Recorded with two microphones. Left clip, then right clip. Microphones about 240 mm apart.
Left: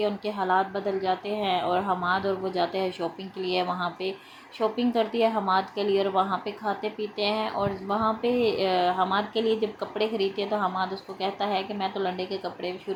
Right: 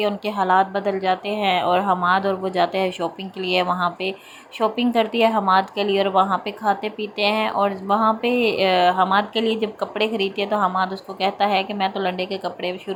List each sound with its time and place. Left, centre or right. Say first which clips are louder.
0.0 s a woman's voice: right 6 dB; centre